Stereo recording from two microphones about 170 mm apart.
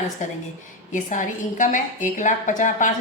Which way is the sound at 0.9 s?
50° left (ahead or behind).